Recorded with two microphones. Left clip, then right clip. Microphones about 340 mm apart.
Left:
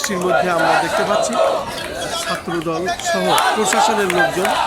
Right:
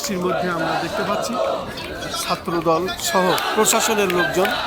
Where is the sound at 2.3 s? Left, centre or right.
Centre.